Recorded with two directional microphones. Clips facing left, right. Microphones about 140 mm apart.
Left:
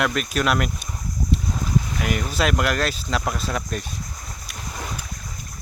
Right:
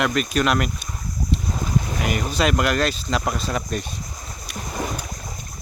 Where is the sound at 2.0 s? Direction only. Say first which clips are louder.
Right 3 dB; centre (ahead or behind).